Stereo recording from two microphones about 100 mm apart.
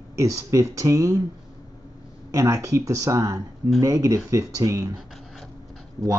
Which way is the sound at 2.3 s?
30° right (ahead or behind).